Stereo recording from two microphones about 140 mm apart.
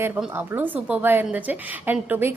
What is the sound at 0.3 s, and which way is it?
A woman's voice, 15° right (ahead or behind).